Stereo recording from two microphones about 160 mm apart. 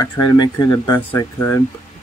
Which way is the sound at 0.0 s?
25° left (ahead or behind).